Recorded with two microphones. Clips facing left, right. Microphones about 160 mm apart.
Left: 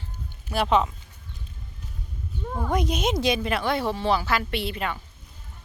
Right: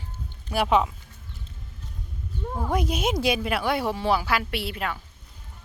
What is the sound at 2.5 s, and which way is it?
Speech, 5° right (ahead or behind).